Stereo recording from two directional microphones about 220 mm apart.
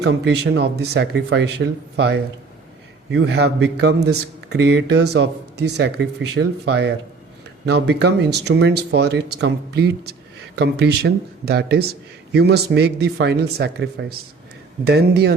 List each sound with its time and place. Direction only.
0.0 s a man's voice: 50° right (ahead or behind)